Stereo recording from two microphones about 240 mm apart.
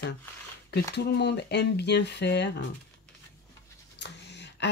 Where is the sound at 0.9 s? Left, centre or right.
Left.